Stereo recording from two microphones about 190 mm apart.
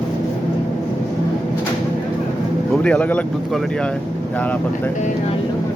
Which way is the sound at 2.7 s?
5° left (ahead or behind).